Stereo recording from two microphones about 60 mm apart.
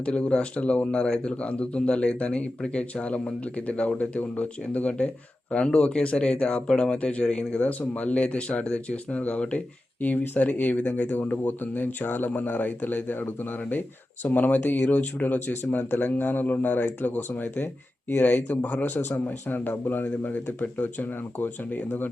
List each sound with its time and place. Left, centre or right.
0.0 s speech: centre